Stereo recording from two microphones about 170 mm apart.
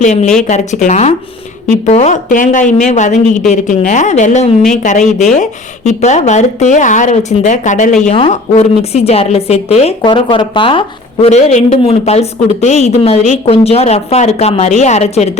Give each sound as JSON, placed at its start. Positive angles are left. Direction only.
{"t": 0.0, "sound": "a woman's voice", "side_deg": 40}